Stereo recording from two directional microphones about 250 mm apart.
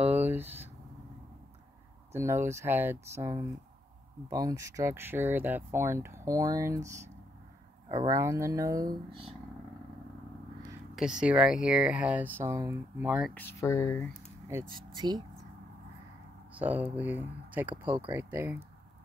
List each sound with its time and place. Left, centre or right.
0.0 s a sound: centre
2.1 s speech: centre
11.0 s speech: centre
13.3 s speech: centre
14.5 s speech: centre
16.5 s speech: centre